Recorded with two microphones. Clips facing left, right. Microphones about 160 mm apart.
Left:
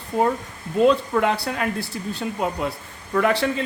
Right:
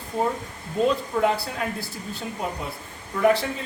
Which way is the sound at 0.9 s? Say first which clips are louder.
Left 3 dB; 75° left (ahead or behind).